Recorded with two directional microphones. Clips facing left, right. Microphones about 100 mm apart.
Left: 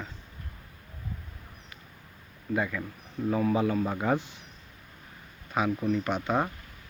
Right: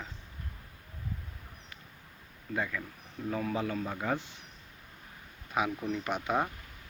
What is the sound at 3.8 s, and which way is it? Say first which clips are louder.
Speech: left 6 dB; 40° left (ahead or behind).